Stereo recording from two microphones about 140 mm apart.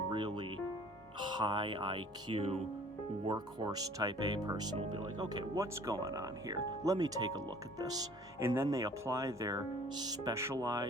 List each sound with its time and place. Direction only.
0.1 s music: 35° right (ahead or behind)
1.2 s speech: 35° right (ahead or behind)
3.2 s speech: 30° right (ahead or behind)